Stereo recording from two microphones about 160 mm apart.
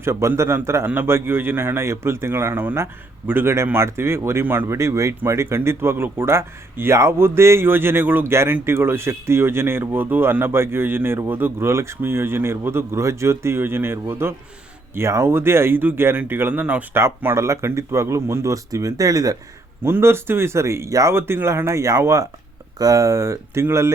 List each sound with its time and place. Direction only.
0.0 s a man's voice: 15° right (ahead or behind)